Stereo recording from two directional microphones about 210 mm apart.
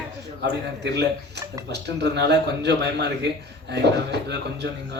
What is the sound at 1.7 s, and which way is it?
A man's voice, 55° right (ahead or behind).